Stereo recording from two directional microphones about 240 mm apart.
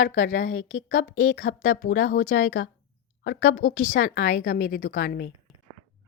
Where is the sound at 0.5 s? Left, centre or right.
Left.